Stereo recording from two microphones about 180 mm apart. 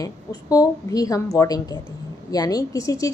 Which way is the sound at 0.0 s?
20° left (ahead or behind).